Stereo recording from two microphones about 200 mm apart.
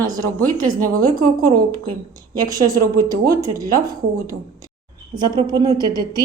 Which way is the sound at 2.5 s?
20° right (ahead or behind).